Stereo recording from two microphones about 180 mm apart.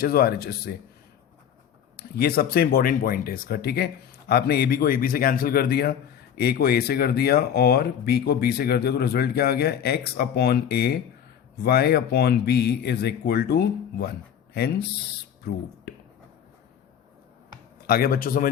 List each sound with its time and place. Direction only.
0.0 s speech: 55° left (ahead or behind)
2.0 s speech: 60° left (ahead or behind)
17.8 s speech: 55° left (ahead or behind)